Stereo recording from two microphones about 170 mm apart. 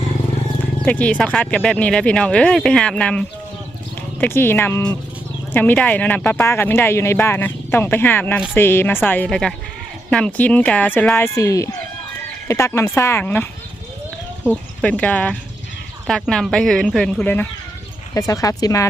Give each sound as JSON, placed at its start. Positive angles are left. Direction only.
{"t": 0.6, "sound": "speech", "side_deg": 10}
{"t": 14.5, "sound": "speech", "side_deg": 5}